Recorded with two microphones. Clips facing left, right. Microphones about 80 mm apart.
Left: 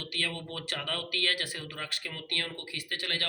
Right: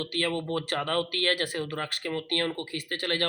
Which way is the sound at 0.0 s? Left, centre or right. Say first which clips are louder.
Right 7 dB; right.